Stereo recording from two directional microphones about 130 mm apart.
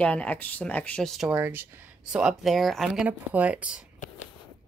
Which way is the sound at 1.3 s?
15° right (ahead or behind).